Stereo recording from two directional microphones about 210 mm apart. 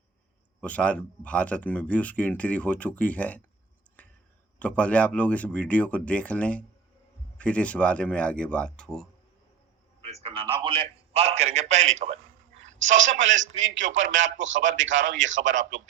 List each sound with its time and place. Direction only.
0.6 s speech: 5° left (ahead or behind)
4.0 s a sound: 5° left (ahead or behind)
4.6 s speech: 5° left (ahead or behind)
10.0 s a man's voice: 30° right (ahead or behind)
13.0 s a man's voice: 65° right (ahead or behind)